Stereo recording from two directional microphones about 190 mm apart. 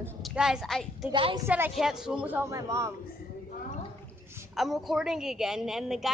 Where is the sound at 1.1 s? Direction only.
25° right (ahead or behind).